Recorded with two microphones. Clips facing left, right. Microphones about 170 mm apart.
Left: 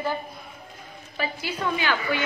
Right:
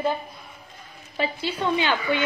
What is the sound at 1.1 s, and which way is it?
A woman's voice, 25° right (ahead or behind).